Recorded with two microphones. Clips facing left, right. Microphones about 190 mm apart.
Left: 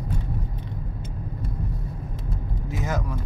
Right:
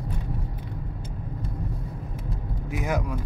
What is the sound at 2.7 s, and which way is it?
Speech, 15° right (ahead or behind).